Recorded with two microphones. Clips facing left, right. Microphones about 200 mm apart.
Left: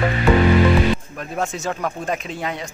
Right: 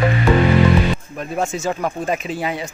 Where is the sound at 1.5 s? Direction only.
Centre (ahead or behind).